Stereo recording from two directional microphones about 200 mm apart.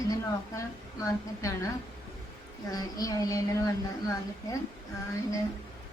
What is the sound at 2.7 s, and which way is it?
A woman's voice, 20° left (ahead or behind).